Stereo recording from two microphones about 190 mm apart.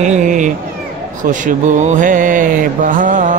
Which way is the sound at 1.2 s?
45° right (ahead or behind).